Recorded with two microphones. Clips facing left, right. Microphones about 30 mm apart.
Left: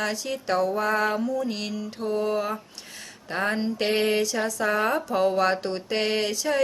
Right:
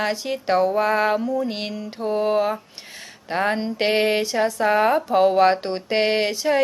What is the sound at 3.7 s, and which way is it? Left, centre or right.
A woman's voice, right.